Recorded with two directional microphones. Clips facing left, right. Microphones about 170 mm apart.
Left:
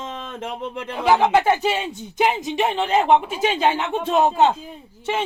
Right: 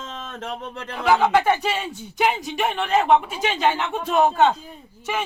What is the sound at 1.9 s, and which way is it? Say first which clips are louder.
Speech: left 1 dB; 15° left (ahead or behind).